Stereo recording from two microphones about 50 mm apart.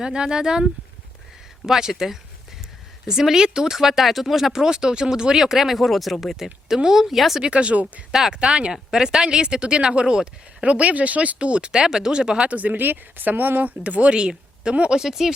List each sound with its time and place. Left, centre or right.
0.0 s speech: centre
7.4 s speech: right
8.3 s speech: centre
12.5 s speech: right
14.1 s speech: centre
15.0 s speech: centre